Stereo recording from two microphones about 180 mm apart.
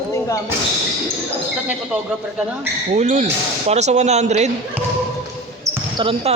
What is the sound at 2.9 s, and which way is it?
Speech, 40° right (ahead or behind).